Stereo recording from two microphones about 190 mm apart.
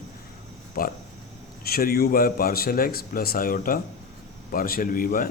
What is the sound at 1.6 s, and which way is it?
A man's voice, 50° left (ahead or behind).